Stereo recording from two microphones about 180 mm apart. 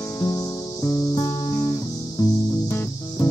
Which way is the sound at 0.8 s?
20° left (ahead or behind).